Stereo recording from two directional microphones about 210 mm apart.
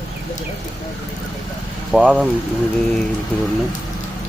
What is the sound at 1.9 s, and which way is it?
Speech, 5° right (ahead or behind).